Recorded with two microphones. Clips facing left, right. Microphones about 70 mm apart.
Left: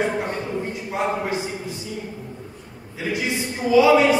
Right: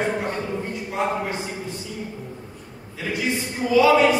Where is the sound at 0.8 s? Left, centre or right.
Centre.